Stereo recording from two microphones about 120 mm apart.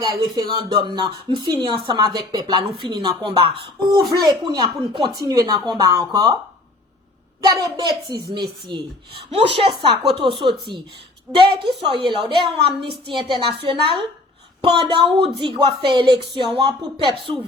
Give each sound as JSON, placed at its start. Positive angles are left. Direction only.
{"t": 0.0, "sound": "speech", "side_deg": -35}
{"t": 7.4, "sound": "speech", "side_deg": -35}
{"t": 9.3, "sound": "a woman's voice", "side_deg": -55}